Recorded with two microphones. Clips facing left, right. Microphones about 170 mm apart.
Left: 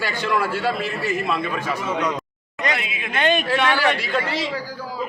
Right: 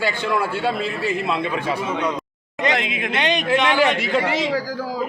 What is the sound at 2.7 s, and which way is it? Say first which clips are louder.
Speech: right 6 dB; 90° right.